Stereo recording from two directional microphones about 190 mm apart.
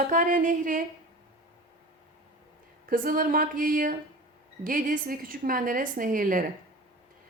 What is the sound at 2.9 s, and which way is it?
A woman's voice, 50° right (ahead or behind).